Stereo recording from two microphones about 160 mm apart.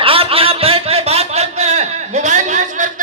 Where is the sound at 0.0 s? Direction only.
35° right (ahead or behind).